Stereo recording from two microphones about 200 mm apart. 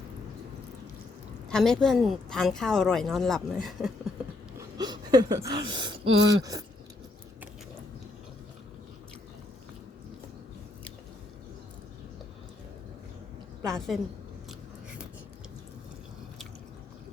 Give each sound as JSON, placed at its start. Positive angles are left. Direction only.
{"t": 1.5, "sound": "a woman's voice", "side_deg": 0}
{"t": 4.5, "sound": "speech", "side_deg": -20}
{"t": 13.7, "sound": "a woman's voice", "side_deg": 0}